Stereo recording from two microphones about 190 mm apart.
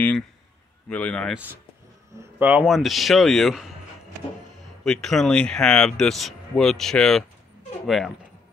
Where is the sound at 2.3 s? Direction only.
5° right (ahead or behind).